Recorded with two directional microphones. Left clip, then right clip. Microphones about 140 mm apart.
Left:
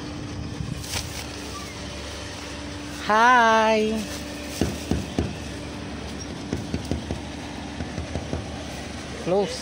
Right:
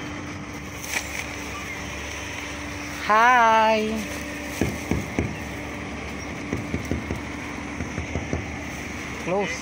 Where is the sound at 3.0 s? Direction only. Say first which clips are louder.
Even; 85° left.